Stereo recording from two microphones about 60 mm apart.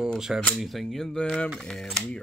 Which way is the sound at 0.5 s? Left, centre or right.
Centre.